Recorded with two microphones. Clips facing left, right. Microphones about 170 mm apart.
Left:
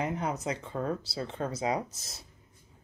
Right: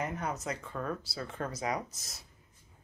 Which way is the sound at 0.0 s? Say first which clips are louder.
Left 4 dB; 20° left (ahead or behind).